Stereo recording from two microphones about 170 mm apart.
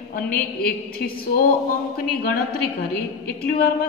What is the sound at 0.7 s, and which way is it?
Speech, 60° left (ahead or behind).